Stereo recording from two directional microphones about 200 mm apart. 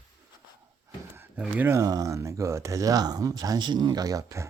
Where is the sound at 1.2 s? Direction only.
10° right (ahead or behind).